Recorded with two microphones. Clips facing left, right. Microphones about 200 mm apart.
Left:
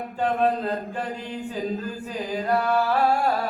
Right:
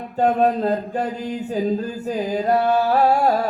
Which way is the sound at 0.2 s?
40° right (ahead or behind).